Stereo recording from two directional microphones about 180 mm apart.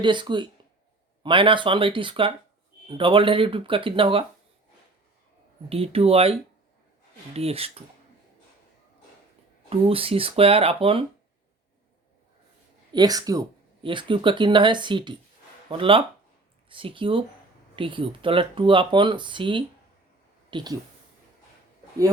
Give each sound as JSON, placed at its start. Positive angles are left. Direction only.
{"t": 0.0, "sound": "speech", "side_deg": -25}
{"t": 5.6, "sound": "speech", "side_deg": -30}
{"t": 9.6, "sound": "speech", "side_deg": -30}
{"t": 12.9, "sound": "speech", "side_deg": -20}